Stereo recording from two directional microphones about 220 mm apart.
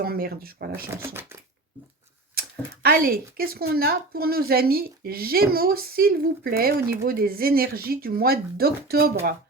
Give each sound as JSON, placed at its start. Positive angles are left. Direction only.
{"t": 0.0, "sound": "a woman's voice", "side_deg": -45}
{"t": 0.9, "sound": "speech", "side_deg": -10}
{"t": 2.8, "sound": "a woman's voice", "side_deg": -40}